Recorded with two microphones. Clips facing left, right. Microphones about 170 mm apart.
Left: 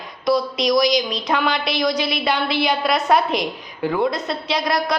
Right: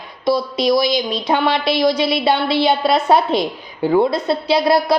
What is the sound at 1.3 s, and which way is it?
A woman's voice, 30° right (ahead or behind).